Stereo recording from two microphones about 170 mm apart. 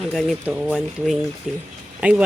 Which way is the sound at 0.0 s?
Centre (ahead or behind).